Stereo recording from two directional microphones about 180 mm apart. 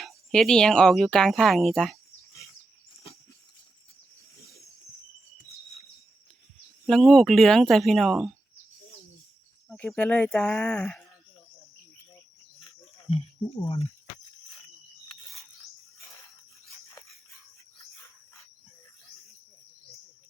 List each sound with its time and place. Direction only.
0.0 s speech: centre (ahead or behind)
6.8 s speech: centre (ahead or behind)
9.6 s speech: 10° left (ahead or behind)
13.6 s speech: 30° left (ahead or behind)